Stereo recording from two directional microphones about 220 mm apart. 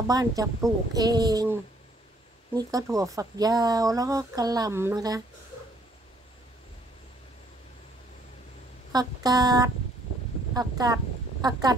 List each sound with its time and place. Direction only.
0.0 s speech: 15° right (ahead or behind)
8.9 s speech: 15° right (ahead or behind)